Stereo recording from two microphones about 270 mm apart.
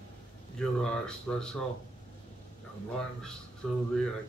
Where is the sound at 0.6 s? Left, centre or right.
Centre.